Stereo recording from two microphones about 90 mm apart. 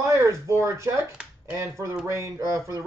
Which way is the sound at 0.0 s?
35° right (ahead or behind).